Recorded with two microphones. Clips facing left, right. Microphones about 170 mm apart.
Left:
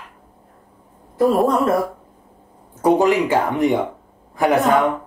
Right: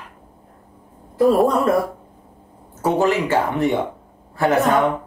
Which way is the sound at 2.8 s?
15° left (ahead or behind).